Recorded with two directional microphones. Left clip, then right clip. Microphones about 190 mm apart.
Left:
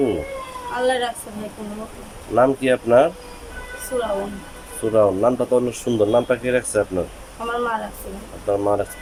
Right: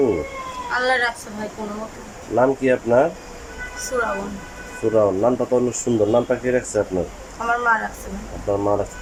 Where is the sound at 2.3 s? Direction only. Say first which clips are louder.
Left 1 dB; centre (ahead or behind).